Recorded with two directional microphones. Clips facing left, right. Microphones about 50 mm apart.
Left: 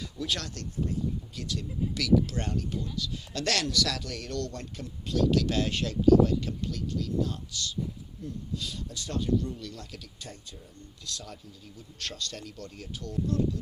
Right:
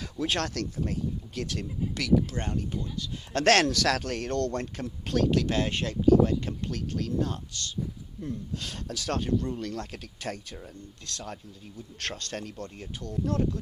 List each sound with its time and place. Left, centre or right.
0.2 s speech: right
0.4 s speech: right
1.4 s speech: right
2.0 s speech: right
3.3 s speech: right
5.3 s speech: right
6.7 s speech: right
9.2 s speech: right
10.2 s speech: right
11.0 s speech: right
13.2 s speech: right